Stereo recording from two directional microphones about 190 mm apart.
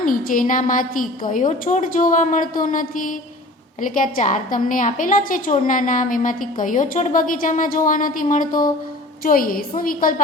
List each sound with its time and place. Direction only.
0.0 s a woman's voice: 45° left (ahead or behind)